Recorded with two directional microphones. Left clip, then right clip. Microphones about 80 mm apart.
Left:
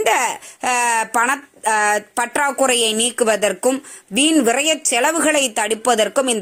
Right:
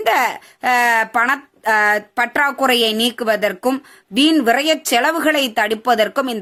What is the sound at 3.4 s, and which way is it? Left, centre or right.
Speech, centre.